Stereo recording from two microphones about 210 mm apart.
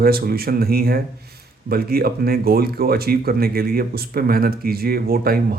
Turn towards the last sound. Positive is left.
turn(degrees=-45)  # may be behind; listen again after turning